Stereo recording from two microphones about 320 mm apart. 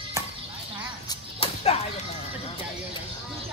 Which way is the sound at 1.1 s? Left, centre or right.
Centre.